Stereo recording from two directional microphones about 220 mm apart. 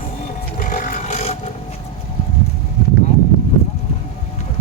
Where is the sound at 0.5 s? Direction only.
40° left (ahead or behind).